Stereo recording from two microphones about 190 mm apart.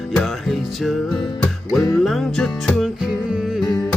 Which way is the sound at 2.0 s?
Centre (ahead or behind).